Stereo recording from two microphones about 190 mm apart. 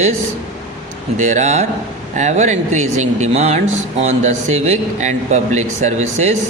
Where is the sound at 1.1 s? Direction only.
40° right (ahead or behind).